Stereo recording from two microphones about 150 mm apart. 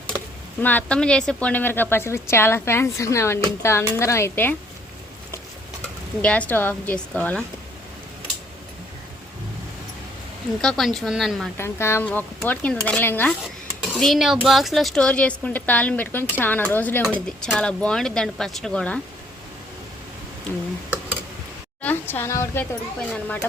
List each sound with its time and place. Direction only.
0.6 s a woman's voice: 10° left (ahead or behind)
6.2 s speech: 10° left (ahead or behind)
10.6 s speech: centre (ahead or behind)
11.5 s speech: 15° left (ahead or behind)
13.9 s speech: centre (ahead or behind)
21.8 s speech: 10° left (ahead or behind)